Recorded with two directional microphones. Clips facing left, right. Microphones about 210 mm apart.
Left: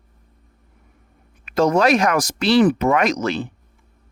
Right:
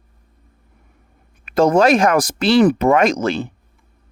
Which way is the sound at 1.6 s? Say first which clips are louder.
Right 3 dB; 50° right (ahead or behind).